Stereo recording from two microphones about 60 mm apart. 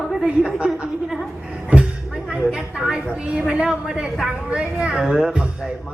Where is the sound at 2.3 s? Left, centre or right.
Centre.